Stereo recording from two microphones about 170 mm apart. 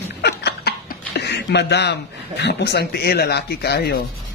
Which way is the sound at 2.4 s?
80° left.